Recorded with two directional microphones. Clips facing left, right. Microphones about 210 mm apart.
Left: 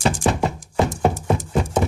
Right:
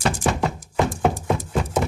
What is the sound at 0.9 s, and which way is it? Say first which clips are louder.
Horse: left 1 dB; 45° left (ahead or behind).